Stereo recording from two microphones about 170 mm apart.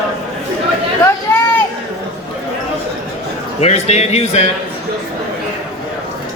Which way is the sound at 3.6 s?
40° left (ahead or behind).